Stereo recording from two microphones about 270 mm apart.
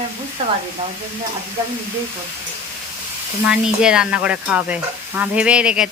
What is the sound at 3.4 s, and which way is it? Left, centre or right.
Stir, centre.